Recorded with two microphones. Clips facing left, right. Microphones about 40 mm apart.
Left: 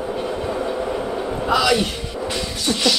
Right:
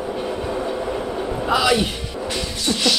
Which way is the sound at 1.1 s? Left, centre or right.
Centre.